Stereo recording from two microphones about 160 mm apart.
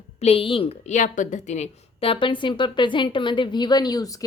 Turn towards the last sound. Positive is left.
turn(degrees=25)  # may be behind; listen again after turning